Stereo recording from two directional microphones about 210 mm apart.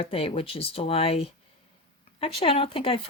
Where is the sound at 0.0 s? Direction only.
25° left (ahead or behind).